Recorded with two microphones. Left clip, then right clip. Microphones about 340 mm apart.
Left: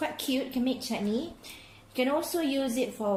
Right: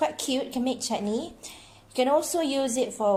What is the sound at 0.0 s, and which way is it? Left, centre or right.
A woman's voice, right.